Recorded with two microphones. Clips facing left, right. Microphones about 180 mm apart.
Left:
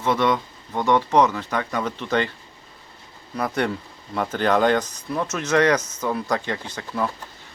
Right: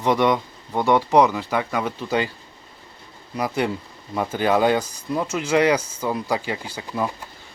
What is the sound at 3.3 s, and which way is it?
Speech, 10° right (ahead or behind).